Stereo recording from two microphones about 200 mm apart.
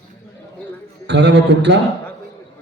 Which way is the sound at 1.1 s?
60° right (ahead or behind).